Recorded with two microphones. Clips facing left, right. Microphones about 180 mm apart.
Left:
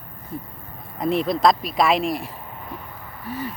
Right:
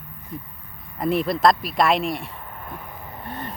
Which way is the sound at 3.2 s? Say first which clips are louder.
Left 5 dB; 5° left (ahead or behind).